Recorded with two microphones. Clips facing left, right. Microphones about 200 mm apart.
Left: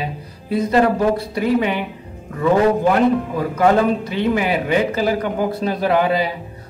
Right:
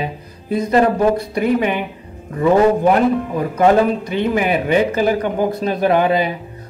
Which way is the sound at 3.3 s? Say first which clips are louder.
Right 2 dB; 20° right (ahead or behind).